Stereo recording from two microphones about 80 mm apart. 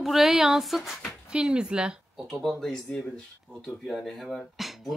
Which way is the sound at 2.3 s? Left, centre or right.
Centre.